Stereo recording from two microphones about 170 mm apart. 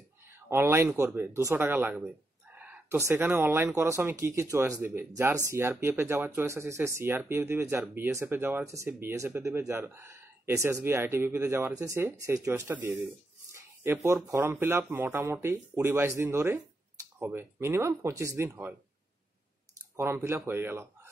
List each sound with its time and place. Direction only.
0.5 s speech: 15° right (ahead or behind)
20.0 s speech: 15° right (ahead or behind)